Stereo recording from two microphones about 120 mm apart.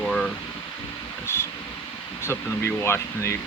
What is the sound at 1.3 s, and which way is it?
Speech, 20° left (ahead or behind).